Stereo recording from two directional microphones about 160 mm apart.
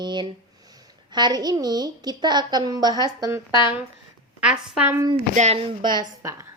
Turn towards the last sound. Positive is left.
turn(degrees=-25)  # may be behind; listen again after turning